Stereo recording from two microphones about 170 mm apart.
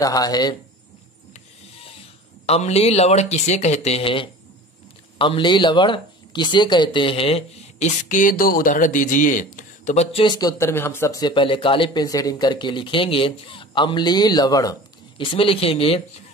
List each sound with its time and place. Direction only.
0.0 s speech: 20° left (ahead or behind)
1.3 s printer: 35° left (ahead or behind)
2.4 s speech: 35° left (ahead or behind)
10.2 s speech: 25° left (ahead or behind)